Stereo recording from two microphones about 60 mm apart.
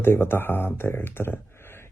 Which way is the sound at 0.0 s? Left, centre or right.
Left.